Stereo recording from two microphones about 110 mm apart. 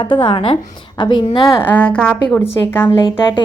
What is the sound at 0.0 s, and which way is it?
A woman's voice, 45° left (ahead or behind).